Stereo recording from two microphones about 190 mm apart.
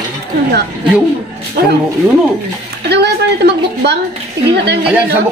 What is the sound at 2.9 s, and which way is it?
A woman's voice, 60° right (ahead or behind).